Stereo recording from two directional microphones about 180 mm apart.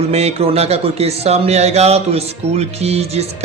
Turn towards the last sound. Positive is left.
turn(degrees=-35)  # may be behind; listen again after turning